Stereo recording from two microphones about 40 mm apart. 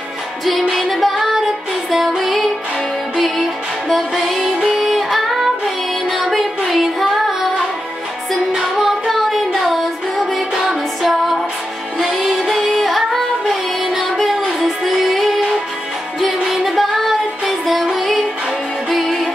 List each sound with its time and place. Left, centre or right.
0.7 s music: centre
4.4 s music: centre
4.7 s music: centre
8.7 s music: centre
16.4 s music: centre
18.9 s music: centre